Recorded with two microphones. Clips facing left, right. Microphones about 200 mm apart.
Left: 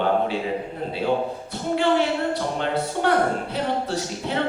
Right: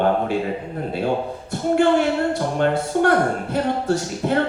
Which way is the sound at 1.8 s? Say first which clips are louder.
Right 3 dB; 50° right (ahead or behind).